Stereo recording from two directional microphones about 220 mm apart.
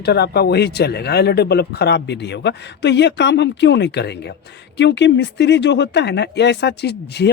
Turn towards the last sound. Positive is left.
turn(degrees=50)  # may be behind; listen again after turning